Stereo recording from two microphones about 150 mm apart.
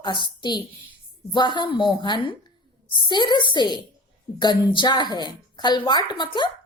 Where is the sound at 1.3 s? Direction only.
30° left (ahead or behind).